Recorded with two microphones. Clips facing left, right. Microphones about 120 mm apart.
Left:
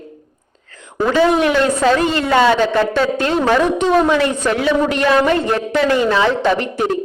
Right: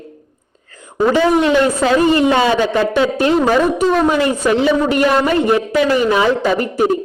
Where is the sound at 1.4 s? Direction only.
15° right (ahead or behind).